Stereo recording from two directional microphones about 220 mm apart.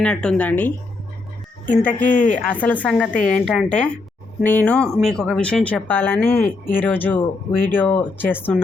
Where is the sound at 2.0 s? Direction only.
35° left (ahead or behind).